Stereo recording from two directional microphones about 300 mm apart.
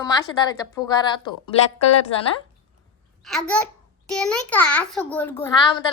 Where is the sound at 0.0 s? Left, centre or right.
Centre.